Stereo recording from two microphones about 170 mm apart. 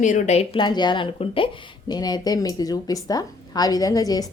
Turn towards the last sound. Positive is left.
turn(degrees=20)  # may be behind; listen again after turning